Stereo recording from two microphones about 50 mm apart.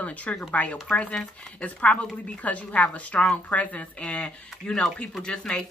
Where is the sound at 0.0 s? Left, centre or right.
Left.